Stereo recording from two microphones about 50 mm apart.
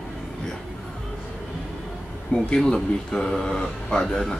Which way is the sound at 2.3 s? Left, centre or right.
Left.